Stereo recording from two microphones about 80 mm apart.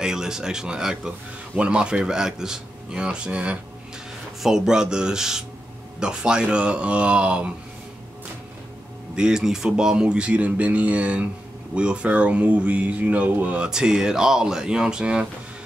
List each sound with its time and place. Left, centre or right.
0.0 s speech: centre
9.1 s speech: centre
13.7 s speech: centre